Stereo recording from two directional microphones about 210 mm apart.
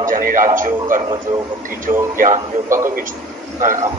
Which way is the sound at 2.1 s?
40° right (ahead or behind).